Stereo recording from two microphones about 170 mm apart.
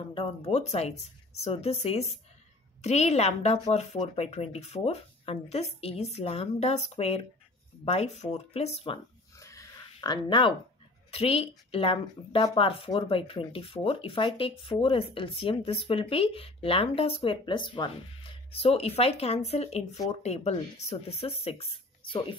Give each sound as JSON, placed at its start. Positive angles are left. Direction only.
{"t": 0.1, "sound": "speech", "side_deg": 35}
{"t": 9.4, "sound": "dog", "side_deg": 20}
{"t": 9.9, "sound": "speech", "side_deg": 25}